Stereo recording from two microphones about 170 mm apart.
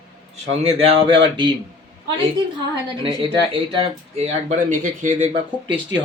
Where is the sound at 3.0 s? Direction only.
30° right (ahead or behind); by 5.3 s 50° right (ahead or behind).